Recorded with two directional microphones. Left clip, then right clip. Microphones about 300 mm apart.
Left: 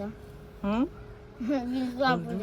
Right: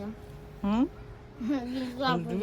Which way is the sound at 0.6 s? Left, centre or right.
Centre.